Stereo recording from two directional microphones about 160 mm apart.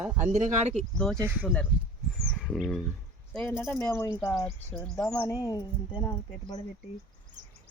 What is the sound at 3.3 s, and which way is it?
Speech, 15° left (ahead or behind).